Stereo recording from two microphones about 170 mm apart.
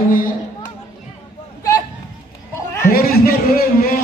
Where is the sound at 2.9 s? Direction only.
60° left (ahead or behind).